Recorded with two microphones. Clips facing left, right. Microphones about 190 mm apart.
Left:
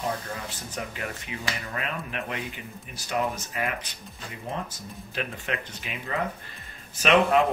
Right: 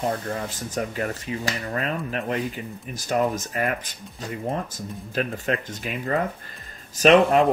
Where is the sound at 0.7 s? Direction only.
40° right (ahead or behind).